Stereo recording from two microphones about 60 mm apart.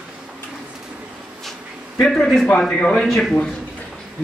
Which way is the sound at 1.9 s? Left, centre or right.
Centre.